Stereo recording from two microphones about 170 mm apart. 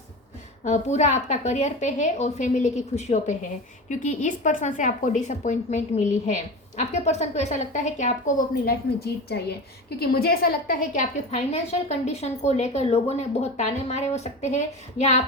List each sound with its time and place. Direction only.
0.6 s a woman's voice: 45° left (ahead or behind)